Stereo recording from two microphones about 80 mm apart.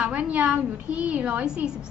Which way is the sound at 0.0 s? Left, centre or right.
Centre.